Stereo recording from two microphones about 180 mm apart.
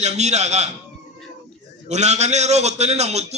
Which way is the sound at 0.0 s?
40° right (ahead or behind).